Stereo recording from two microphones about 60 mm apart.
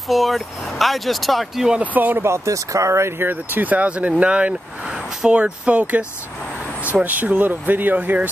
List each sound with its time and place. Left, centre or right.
0.1 s speech: centre
1.8 s speech: right
2.2 s speech: right
3.2 s speech: right